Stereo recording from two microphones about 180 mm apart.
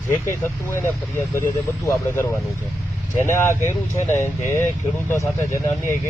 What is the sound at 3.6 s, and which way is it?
Speech, 15° left (ahead or behind).